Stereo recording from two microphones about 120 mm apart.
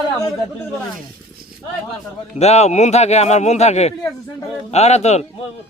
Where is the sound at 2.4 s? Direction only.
65° left (ahead or behind).